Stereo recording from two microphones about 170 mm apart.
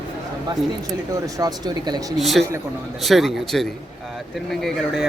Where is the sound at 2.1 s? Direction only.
Centre (ahead or behind).